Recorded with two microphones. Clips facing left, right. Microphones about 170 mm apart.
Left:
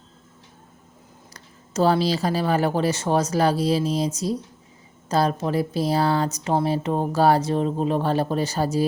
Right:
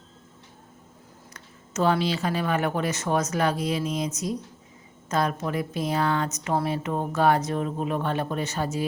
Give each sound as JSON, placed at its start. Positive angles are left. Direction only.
{"t": 1.3, "sound": "speech", "side_deg": 35}